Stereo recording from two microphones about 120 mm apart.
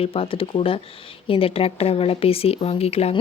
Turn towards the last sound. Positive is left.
turn(degrees=60)  # may be behind; listen again after turning